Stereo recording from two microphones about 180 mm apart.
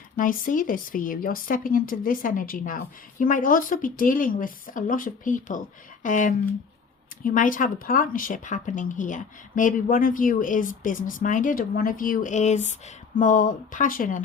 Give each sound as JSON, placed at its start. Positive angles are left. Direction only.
{"t": 0.2, "sound": "speech", "side_deg": 50}